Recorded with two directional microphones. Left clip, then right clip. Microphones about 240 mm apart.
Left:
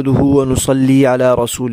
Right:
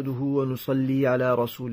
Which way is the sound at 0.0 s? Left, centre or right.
Left.